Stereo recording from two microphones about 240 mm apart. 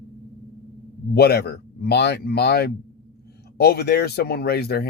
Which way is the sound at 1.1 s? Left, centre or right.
Left.